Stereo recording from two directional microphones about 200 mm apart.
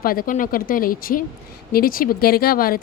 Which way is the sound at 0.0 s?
45° left (ahead or behind).